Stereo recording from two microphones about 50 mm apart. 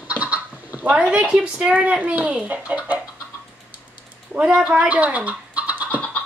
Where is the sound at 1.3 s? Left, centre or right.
Centre.